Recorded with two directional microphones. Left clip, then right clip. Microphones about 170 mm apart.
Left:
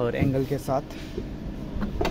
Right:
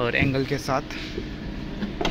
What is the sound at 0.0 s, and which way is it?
Speech, 25° left (ahead or behind).